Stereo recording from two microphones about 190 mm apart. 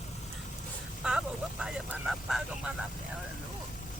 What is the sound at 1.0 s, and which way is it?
Vehicle, 5° right (ahead or behind).